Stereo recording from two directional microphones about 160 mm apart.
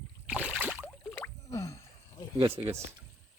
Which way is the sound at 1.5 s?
20° left (ahead or behind).